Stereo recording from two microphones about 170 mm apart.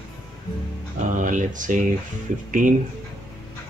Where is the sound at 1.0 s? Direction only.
50° right (ahead or behind).